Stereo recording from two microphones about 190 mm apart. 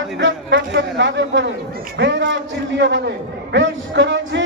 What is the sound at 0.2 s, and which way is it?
A man's voice, 70° right (ahead or behind).